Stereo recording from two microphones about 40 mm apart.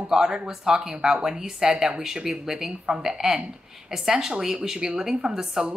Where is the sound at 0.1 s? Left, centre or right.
Centre.